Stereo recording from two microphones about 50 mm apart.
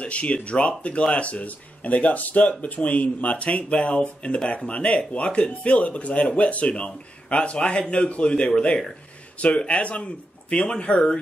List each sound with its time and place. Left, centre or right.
0.0 s speech: left